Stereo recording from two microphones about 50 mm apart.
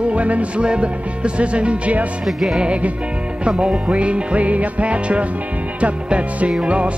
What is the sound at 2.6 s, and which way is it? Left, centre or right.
Music, right.